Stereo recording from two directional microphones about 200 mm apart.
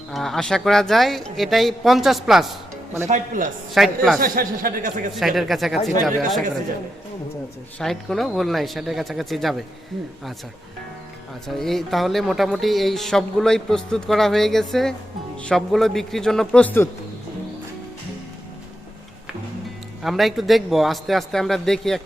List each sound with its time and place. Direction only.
0.1 s speech: centre (ahead or behind)
3.1 s speech: 40° right (ahead or behind)
3.8 s speech: centre (ahead or behind)
4.2 s speech: 45° right (ahead or behind)
5.1 s speech: centre (ahead or behind)
7.8 s speech: centre (ahead or behind)
11.4 s speech: centre (ahead or behind)
20.0 s speech: centre (ahead or behind)